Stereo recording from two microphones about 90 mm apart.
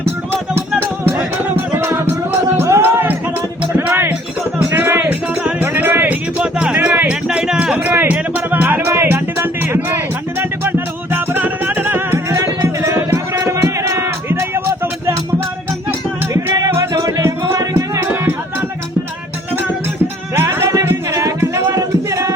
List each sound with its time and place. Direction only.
0.3 s music: 25° right (ahead or behind); by 7.9 s 10° right (ahead or behind)
7.9 s music: 20° right (ahead or behind)
16.3 s music: 40° right (ahead or behind)
20.3 s music: 30° right (ahead or behind)